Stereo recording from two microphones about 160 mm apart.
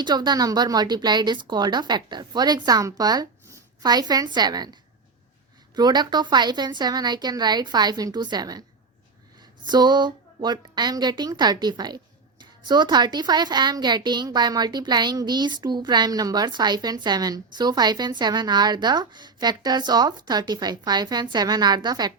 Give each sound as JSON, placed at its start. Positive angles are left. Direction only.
{"t": 0.0, "sound": "a woman's voice", "side_deg": -25}
{"t": 9.6, "sound": "a woman's voice", "side_deg": -25}